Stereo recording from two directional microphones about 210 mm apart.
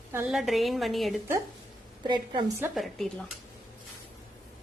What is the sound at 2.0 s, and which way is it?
Speech, 20° right (ahead or behind).